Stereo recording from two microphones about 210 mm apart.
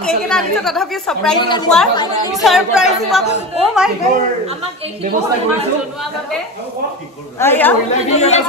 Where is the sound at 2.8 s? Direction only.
30° left (ahead or behind).